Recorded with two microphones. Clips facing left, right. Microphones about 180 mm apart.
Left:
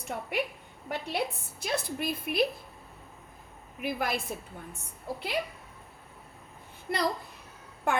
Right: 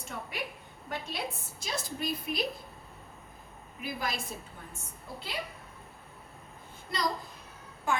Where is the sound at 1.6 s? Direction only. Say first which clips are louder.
Left 4 dB; 60° left (ahead or behind).